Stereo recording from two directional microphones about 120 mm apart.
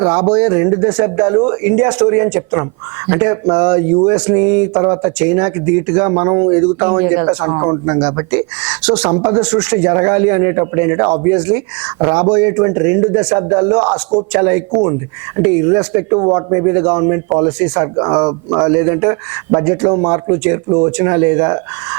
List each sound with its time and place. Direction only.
0.0 s speech: 20° right (ahead or behind)
9.1 s speech: 30° right (ahead or behind)
9.4 s speech: 15° right (ahead or behind)